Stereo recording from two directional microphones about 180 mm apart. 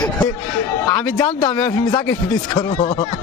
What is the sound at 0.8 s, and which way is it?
A man's voice, 20° left (ahead or behind).